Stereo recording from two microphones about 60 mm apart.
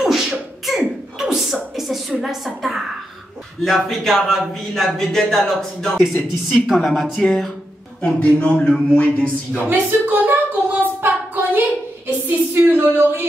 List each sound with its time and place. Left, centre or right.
0.0 s beatboxing: centre
2.2 s a sound: centre
3.6 s speech: centre
8.0 s a man's voice: centre
9.7 s a sound: right
12.3 s speech: right